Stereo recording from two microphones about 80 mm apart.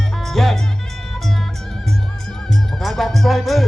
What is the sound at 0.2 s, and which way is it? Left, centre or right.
Music, centre.